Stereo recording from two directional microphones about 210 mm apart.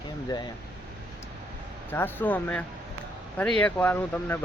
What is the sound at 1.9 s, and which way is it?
Speech, 10° left (ahead or behind).